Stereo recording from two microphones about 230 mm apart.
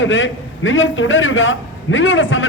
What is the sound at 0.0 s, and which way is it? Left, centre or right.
A man's voice, left.